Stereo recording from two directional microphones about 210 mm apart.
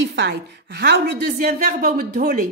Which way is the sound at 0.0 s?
55° right (ahead or behind).